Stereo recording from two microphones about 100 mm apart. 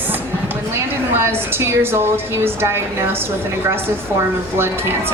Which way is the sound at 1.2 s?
25° right (ahead or behind).